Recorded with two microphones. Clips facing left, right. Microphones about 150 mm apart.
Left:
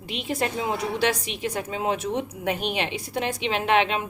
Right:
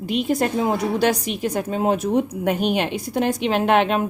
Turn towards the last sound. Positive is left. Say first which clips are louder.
# right 5 dB
turn(degrees=-45)  # may be behind; listen again after turning